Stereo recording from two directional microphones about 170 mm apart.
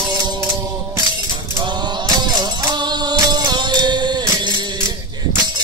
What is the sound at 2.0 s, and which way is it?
Music, 25° right (ahead or behind).